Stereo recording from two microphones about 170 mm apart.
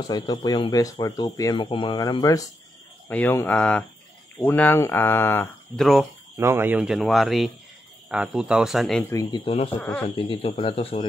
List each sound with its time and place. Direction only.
0.0 s speech: 25° left (ahead or behind)
3.1 s speech: 10° left (ahead or behind)
5.8 s speech: centre (ahead or behind)
6.3 s speech: 15° right (ahead or behind)
9.1 s speech: 20° left (ahead or behind)
9.4 s speech: 35° left (ahead or behind)
9.8 s speech: 10° left (ahead or behind)
10.0 s speech: 30° left (ahead or behind)